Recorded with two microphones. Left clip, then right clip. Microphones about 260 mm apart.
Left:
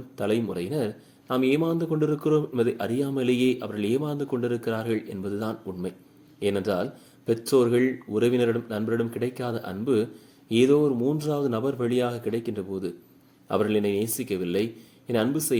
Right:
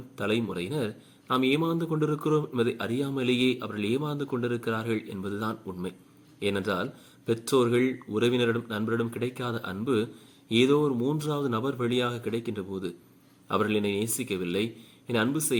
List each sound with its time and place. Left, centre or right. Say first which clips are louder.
0.2 s a man's voice: left 3 dB; centre